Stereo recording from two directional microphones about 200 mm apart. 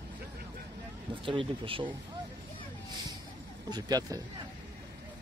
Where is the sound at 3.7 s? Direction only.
20° right (ahead or behind).